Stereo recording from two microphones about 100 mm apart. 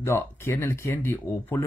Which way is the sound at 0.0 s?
25° left (ahead or behind).